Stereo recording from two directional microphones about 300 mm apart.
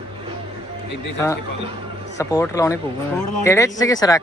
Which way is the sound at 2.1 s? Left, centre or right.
Centre.